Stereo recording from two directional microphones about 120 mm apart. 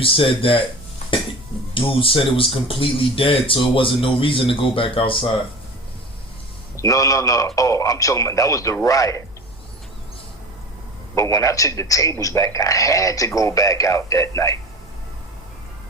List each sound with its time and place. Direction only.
0.0 s speech: 50° left (ahead or behind)
1.7 s speech: 50° left (ahead or behind)
6.7 s a man's voice: 25° left (ahead or behind)
11.1 s a man's voice: 25° left (ahead or behind)